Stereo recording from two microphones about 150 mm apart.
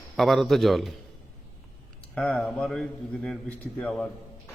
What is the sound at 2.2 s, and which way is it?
A man's voice, 10° left (ahead or behind).